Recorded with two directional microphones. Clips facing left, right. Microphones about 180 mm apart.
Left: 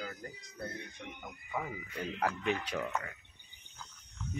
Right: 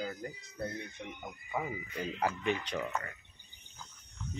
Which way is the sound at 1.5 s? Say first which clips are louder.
Right 2 dB; 5° right (ahead or behind).